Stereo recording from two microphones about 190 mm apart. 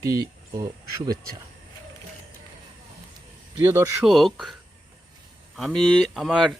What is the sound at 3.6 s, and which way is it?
Speech, 15° right (ahead or behind).